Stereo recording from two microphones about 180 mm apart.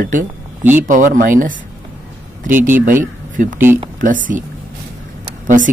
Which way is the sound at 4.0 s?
45° right (ahead or behind).